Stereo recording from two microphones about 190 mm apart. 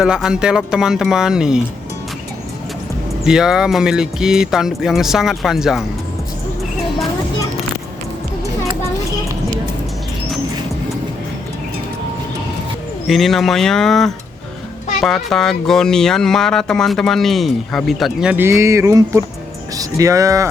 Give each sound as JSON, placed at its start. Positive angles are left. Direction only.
{"t": 0.0, "sound": "speech", "side_deg": -5}
{"t": 3.2, "sound": "speech", "side_deg": -5}
{"t": 13.1, "sound": "speech", "side_deg": 0}